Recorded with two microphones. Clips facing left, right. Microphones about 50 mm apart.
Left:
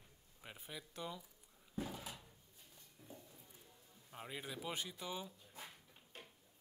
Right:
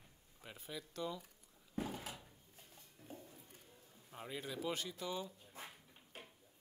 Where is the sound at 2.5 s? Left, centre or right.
Right.